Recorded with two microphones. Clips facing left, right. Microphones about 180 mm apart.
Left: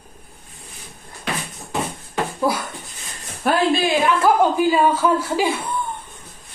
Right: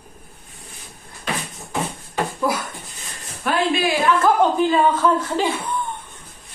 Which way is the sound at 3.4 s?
40° left (ahead or behind).